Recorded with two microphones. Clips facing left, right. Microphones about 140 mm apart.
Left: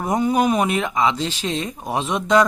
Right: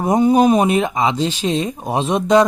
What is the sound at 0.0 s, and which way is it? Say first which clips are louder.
Speech: right 6 dB; 25° right (ahead or behind).